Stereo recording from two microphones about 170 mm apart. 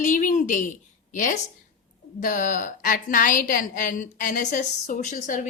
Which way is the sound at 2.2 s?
50° left (ahead or behind).